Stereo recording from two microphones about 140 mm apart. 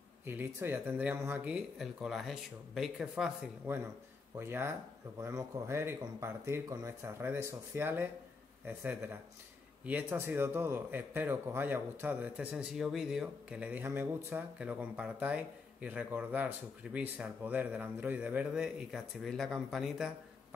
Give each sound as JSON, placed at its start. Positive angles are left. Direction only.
{"t": 0.2, "sound": "a man's voice", "side_deg": -15}
{"t": 3.7, "sound": "a man's voice", "side_deg": -15}